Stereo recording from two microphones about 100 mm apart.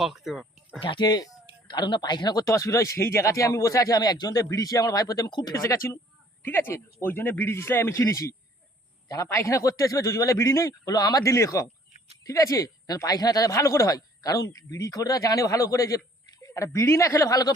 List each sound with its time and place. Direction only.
0.0 s speech: 5° right (ahead or behind)
0.8 s speech: 55° left (ahead or behind)
2.5 s speech: 30° left (ahead or behind); by 5.5 s 45° left (ahead or behind)
5.5 s a man's voice: 30° left (ahead or behind)
10.9 s speech: 40° left (ahead or behind)